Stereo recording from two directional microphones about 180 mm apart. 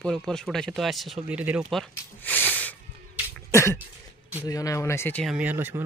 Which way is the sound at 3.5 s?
15° left (ahead or behind).